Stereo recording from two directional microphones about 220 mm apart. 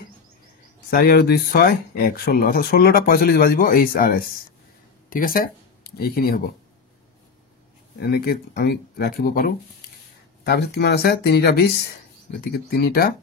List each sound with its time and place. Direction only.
0.8 s speech: 45° left (ahead or behind)
8.0 s speech: 45° left (ahead or behind)